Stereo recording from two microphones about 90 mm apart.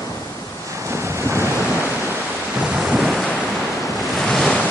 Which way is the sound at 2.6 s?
5° right (ahead or behind).